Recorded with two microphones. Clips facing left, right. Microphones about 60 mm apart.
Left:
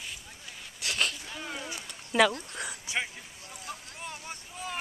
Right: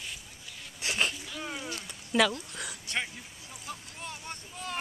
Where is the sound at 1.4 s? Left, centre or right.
Centre.